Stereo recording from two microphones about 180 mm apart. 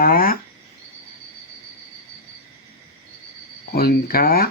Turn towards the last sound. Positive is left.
turn(degrees=55)  # may be behind; listen again after turning